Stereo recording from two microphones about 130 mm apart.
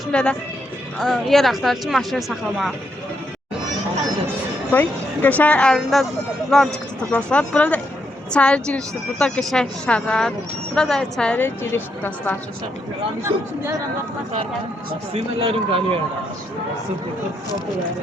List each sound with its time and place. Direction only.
0.1 s speech: 5° left (ahead or behind)
4.7 s a woman's voice: 15° left (ahead or behind)
13.2 s speech: 20° right (ahead or behind)
15.1 s a man's voice: 45° right (ahead or behind)